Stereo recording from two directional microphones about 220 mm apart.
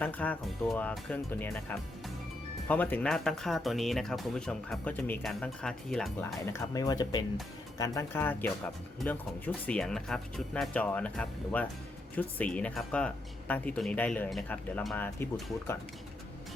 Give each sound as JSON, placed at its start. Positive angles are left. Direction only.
{"t": 0.0, "sound": "speech", "side_deg": 5}
{"t": 6.4, "sound": "speech", "side_deg": 15}